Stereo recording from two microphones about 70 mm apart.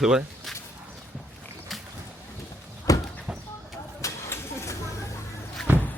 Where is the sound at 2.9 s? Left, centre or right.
Left.